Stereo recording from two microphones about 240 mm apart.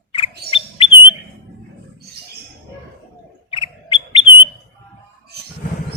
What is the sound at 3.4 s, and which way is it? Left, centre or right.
Bird, left.